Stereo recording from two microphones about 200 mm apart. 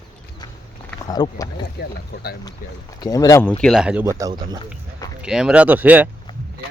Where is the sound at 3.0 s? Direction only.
15° left (ahead or behind).